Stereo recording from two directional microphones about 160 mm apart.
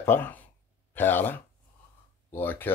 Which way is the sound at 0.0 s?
15° left (ahead or behind).